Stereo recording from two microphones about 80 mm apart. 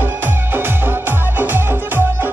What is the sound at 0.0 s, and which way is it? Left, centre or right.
Music, right.